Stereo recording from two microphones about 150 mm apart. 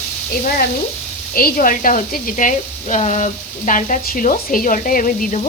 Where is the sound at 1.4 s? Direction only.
70° left (ahead or behind).